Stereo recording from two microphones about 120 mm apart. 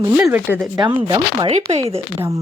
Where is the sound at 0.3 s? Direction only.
15° right (ahead or behind).